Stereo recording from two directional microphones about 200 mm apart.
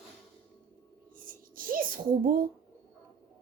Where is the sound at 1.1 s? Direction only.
45° right (ahead or behind).